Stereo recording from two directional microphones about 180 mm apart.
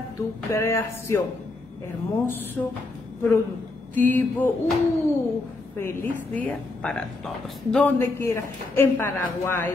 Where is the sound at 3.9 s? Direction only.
10° left (ahead or behind).